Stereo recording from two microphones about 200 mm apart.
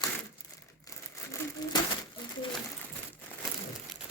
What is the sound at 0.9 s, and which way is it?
Crumpling, 15° left (ahead or behind).